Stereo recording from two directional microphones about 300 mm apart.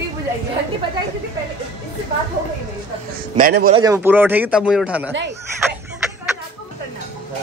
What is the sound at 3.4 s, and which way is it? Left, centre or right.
Speech, right.